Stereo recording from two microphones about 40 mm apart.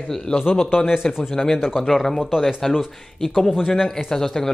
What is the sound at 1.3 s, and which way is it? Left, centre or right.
Speech, centre.